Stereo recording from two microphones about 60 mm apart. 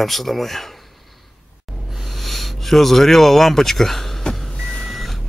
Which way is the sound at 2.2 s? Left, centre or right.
Centre.